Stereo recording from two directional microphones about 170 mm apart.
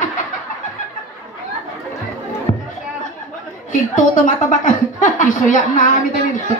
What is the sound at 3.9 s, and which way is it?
A woman's voice, 50° left (ahead or behind).